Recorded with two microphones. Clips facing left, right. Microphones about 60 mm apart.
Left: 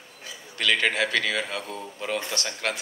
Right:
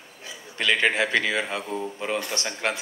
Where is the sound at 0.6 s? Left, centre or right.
Right.